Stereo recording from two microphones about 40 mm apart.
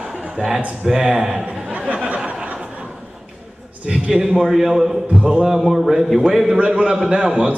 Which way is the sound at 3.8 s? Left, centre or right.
Centre.